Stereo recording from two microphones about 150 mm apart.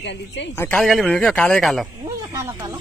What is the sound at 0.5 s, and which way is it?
Speech, 10° left (ahead or behind).